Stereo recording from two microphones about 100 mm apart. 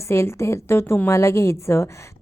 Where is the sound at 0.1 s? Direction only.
25° left (ahead or behind).